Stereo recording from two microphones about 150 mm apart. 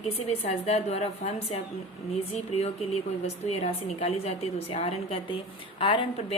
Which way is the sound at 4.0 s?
45° left (ahead or behind).